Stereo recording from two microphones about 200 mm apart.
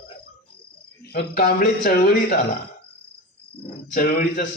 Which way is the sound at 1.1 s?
50° left (ahead or behind).